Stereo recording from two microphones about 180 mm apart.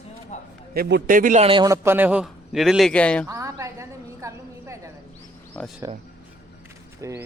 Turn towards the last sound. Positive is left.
turn(degrees=-15)  # may be behind; listen again after turning